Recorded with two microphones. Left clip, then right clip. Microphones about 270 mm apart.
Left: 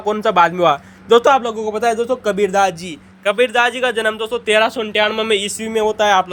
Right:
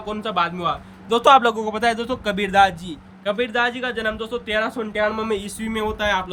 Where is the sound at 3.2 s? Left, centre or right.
Centre.